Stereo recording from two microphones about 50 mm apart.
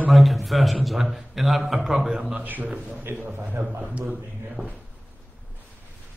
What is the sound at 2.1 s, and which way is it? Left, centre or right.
Speech, right.